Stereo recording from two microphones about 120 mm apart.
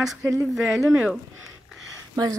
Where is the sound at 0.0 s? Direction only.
5° right (ahead or behind).